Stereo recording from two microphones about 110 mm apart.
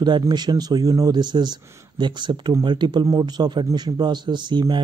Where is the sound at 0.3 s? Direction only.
40° right (ahead or behind).